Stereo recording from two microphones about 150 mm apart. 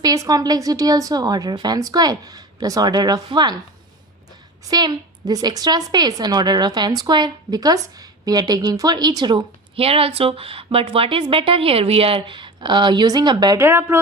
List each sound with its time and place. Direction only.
0.0 s a woman's voice: 25° right (ahead or behind)
4.7 s a woman's voice: 25° right (ahead or behind)